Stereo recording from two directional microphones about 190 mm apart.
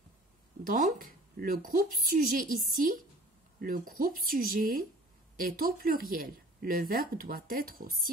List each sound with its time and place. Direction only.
0.7 s speech: 45° right (ahead or behind)